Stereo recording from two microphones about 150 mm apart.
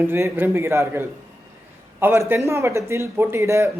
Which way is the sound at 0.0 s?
15° right (ahead or behind).